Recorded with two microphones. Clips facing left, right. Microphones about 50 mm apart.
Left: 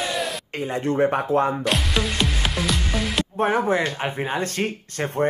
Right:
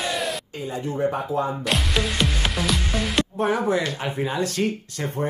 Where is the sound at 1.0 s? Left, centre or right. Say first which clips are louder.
Left 2 dB; left.